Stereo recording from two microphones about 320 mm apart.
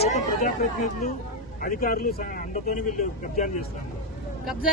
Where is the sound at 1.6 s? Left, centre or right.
Left.